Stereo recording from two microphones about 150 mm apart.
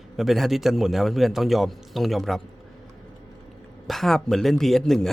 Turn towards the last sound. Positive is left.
turn(degrees=0)  # may be behind; listen again after turning